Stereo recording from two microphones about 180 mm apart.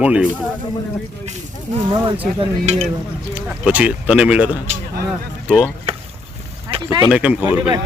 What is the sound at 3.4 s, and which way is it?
Speech, 5° right (ahead or behind).